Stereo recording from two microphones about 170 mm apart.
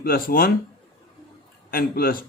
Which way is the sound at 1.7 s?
60° left (ahead or behind).